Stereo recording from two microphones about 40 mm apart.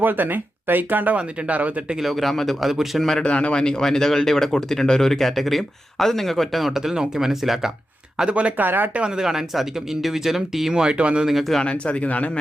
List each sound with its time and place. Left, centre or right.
0.0 s speech: right
1.1 s speech: right
2.0 s a man's voice: centre
3.2 s speech: left; by 7.7 s centre
8.2 s speech: right
8.5 s speech: right
8.9 s speech: right
9.1 s speech: centre
10.9 s speech: right
11.3 s a man's voice: centre
11.6 s speech: left